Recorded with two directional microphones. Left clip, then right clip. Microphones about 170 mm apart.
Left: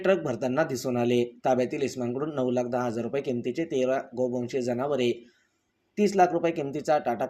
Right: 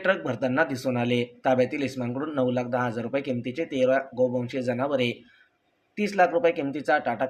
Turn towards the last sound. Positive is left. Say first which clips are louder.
# right 1 dB
turn(degrees=55)  # may be behind; listen again after turning